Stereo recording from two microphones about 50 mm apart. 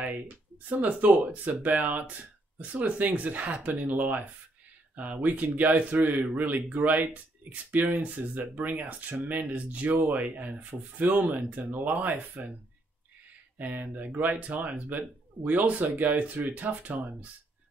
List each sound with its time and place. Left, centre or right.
0.7 s speech: right
13.6 s speech: right